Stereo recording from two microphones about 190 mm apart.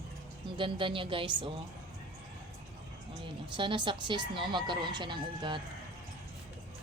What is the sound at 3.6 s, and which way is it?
Speech, 25° right (ahead or behind).